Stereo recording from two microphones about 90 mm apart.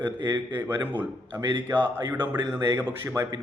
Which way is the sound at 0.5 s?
20° right (ahead or behind).